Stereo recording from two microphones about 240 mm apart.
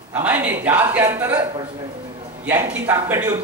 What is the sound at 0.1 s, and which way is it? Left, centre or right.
Speech, centre.